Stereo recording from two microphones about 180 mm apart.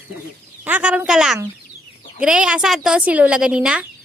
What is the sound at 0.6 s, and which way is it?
A woman's voice, 10° right (ahead or behind).